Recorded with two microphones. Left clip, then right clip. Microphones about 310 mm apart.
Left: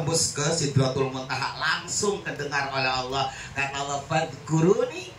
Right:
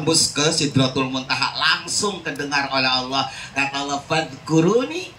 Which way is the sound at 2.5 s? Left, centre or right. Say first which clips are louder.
Right 6 dB; right.